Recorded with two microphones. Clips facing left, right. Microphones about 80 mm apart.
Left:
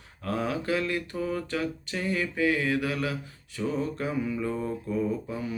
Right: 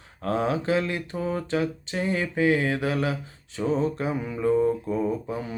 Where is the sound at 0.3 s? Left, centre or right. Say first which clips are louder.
Right 4 dB; right.